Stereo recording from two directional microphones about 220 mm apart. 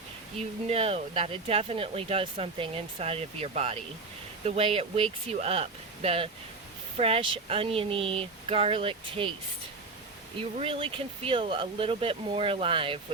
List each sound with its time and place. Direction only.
0.7 s speech: 25° right (ahead or behind)
10.6 s speech: 25° right (ahead or behind)